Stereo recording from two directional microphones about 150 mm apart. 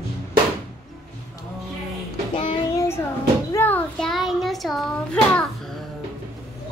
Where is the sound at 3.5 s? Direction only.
10° left (ahead or behind).